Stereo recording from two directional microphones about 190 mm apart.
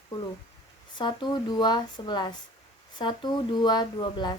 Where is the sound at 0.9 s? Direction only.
25° left (ahead or behind).